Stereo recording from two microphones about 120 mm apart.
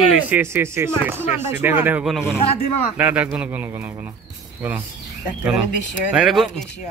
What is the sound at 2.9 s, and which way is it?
Speech, 10° right (ahead or behind).